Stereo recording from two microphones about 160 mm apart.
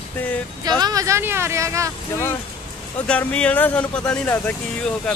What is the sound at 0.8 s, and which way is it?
Speech, 20° right (ahead or behind).